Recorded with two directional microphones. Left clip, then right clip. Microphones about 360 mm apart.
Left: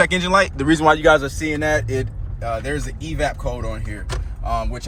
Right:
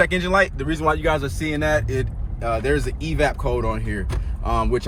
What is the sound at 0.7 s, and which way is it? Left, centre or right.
Speech, left.